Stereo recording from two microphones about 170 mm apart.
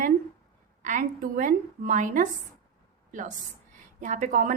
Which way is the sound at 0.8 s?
50° right (ahead or behind).